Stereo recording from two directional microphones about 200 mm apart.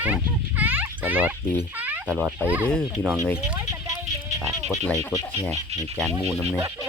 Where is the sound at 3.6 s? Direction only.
15° right (ahead or behind).